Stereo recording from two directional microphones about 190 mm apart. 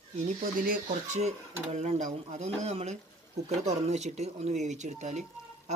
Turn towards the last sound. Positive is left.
turn(degrees=-35)  # may be behind; listen again after turning